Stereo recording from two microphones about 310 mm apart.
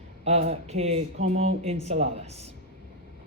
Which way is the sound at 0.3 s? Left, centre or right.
Right.